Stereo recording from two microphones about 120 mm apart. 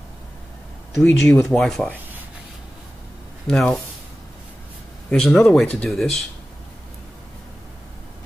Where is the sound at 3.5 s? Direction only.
Centre (ahead or behind).